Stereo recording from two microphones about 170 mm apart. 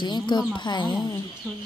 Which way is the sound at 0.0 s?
25° left (ahead or behind).